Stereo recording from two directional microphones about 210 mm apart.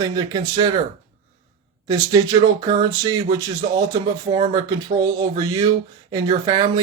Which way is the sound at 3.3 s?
20° right (ahead or behind).